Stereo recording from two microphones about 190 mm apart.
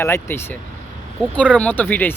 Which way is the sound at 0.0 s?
15° left (ahead or behind).